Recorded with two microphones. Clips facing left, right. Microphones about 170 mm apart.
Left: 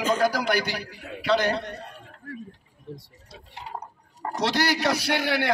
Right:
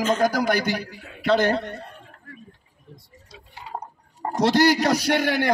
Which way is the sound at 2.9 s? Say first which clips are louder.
Left 9 dB; 80° left.